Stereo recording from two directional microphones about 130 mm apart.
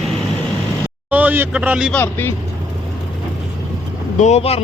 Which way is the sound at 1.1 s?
10° right (ahead or behind).